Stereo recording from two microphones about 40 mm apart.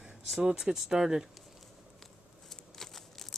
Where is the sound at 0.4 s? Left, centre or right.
Right.